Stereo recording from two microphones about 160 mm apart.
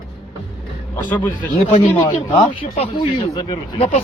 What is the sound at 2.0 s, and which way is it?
Speech, 25° left (ahead or behind).